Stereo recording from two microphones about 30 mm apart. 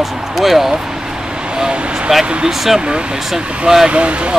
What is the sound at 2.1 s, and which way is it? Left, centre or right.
Speech, centre.